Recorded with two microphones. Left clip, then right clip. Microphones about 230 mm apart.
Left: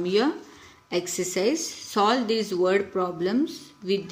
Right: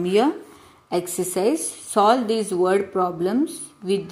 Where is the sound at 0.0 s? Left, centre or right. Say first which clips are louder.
Right 4 dB; centre.